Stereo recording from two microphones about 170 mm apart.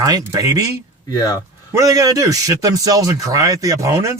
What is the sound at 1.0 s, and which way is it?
Speech, 20° left (ahead or behind).